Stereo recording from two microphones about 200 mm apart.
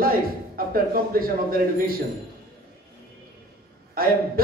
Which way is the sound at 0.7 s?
45° right (ahead or behind).